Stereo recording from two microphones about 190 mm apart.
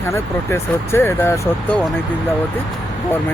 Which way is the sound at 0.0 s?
15° left (ahead or behind).